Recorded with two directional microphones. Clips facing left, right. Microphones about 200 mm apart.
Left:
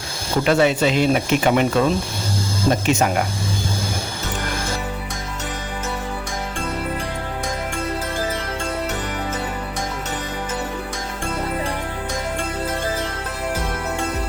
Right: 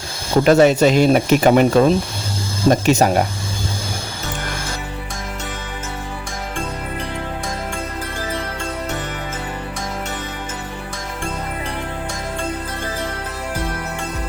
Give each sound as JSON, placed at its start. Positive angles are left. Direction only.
{"t": 0.4, "sound": "speech", "side_deg": -40}